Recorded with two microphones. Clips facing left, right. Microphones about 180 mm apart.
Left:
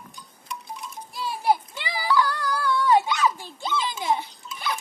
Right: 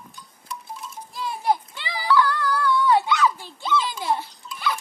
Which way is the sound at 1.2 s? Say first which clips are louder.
Even; 10° left (ahead or behind).